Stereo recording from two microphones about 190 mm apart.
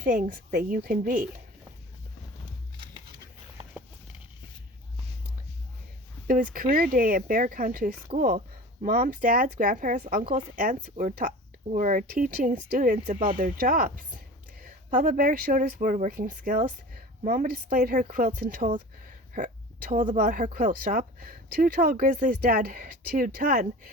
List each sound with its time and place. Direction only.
0.0 s speech: 50° right (ahead or behind)
6.2 s speech: 45° right (ahead or behind)
19.3 s a sound: 45° right (ahead or behind)
20.1 s speech: 50° right (ahead or behind)